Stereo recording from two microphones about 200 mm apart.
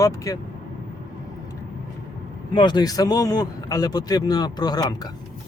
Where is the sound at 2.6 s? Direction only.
20° left (ahead or behind).